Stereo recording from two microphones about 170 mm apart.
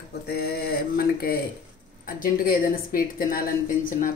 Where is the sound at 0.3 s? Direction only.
65° left (ahead or behind).